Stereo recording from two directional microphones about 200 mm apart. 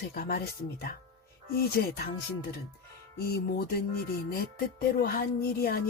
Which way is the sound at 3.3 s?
50° left (ahead or behind).